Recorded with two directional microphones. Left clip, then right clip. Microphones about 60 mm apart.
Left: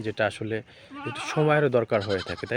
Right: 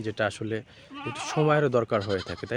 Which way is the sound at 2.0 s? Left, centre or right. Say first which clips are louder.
Left 1 dB; left.